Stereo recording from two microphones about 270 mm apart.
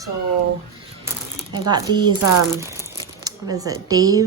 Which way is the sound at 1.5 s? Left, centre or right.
Centre.